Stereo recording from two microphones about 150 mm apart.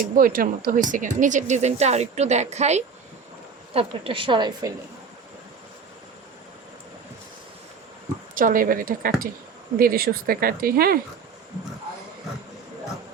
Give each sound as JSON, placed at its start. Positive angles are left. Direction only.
{"t": 0.0, "sound": "speech", "side_deg": -70}
{"t": 3.8, "sound": "a woman's voice", "side_deg": -35}
{"t": 8.4, "sound": "speech", "side_deg": -65}
{"t": 9.7, "sound": "speech", "side_deg": -85}